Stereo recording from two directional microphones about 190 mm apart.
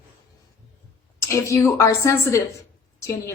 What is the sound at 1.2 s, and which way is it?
A woman's voice, 15° left (ahead or behind).